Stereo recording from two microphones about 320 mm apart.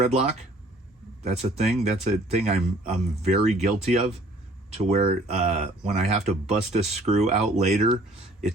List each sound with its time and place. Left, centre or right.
0.0 s speech: centre